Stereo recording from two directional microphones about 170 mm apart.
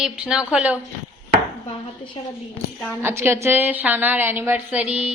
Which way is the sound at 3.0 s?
15° right (ahead or behind).